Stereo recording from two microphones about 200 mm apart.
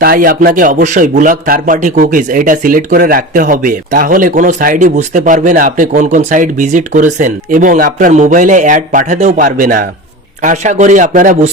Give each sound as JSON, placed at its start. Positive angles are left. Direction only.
{"t": 0.0, "sound": "a man's voice", "side_deg": -45}